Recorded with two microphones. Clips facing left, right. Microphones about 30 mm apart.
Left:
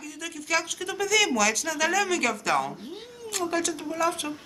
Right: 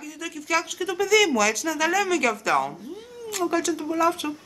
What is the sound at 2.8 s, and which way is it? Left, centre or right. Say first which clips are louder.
Speech: right 2 dB; left.